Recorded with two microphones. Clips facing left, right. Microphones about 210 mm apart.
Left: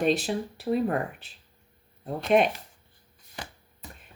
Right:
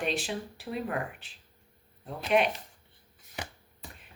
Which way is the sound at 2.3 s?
40° left (ahead or behind).